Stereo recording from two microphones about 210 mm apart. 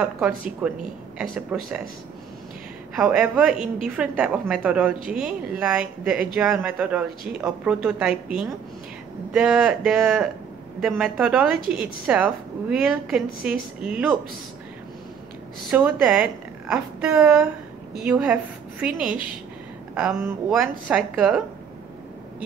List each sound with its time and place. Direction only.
0.0 s a woman's voice: 5° right (ahead or behind)
3.0 s a woman's voice: 5° right (ahead or behind)
15.7 s a woman's voice: 5° right (ahead or behind)